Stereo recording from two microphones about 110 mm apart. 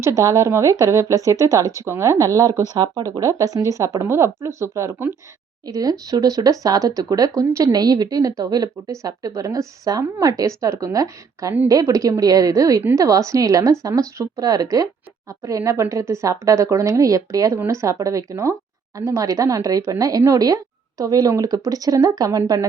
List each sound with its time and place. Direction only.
0.2 s a woman's voice: 30° right (ahead or behind)